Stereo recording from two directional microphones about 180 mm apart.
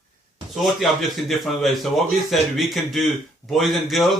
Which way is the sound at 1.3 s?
Centre (ahead or behind).